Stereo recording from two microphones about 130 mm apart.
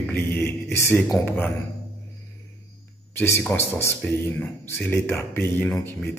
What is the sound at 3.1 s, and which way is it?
A man's voice, 20° left (ahead or behind).